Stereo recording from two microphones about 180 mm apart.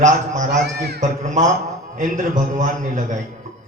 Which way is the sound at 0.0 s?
45° right (ahead or behind).